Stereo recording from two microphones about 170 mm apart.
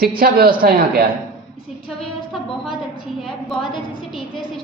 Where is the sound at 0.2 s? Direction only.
60° right (ahead or behind).